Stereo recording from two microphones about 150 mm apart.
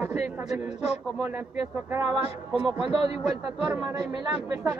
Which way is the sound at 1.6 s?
20° right (ahead or behind).